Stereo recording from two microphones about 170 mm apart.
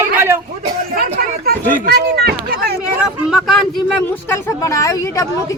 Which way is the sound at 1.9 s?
70° right (ahead or behind).